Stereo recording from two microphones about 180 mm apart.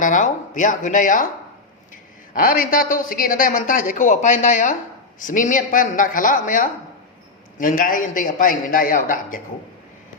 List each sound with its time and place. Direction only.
0.0 s a woman's voice: 45° left (ahead or behind)
2.3 s a woman's voice: 50° left (ahead or behind)